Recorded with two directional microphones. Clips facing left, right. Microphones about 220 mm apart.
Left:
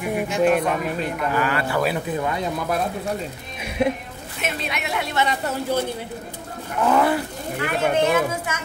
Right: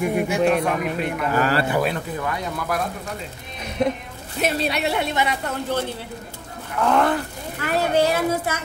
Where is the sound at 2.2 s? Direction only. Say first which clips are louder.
Left 3 dB; 25° left (ahead or behind).